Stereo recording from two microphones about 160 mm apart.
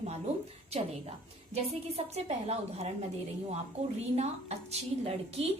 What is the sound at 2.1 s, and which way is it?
Speech, 40° right (ahead or behind).